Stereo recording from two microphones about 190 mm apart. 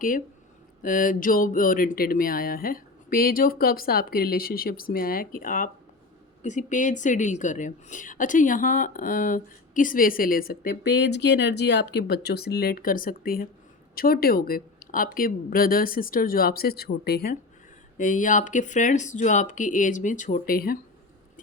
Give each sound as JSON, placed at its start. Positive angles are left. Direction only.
{"t": 0.8, "sound": "a woman's voice", "side_deg": 45}
{"t": 17.9, "sound": "speech", "side_deg": 45}